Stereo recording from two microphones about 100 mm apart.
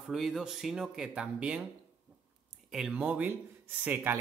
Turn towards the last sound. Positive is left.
turn(degrees=-20)  # may be behind; listen again after turning